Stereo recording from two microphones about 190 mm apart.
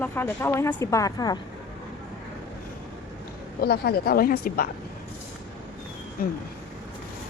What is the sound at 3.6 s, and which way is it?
A woman's voice, 55° left (ahead or behind).